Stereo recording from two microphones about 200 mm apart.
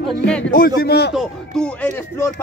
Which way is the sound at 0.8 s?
55° left (ahead or behind).